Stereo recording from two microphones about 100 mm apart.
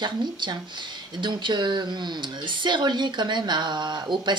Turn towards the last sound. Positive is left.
turn(degrees=-50)  # may be behind; listen again after turning